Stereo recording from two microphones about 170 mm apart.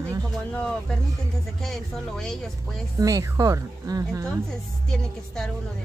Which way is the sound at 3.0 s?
20° right (ahead or behind).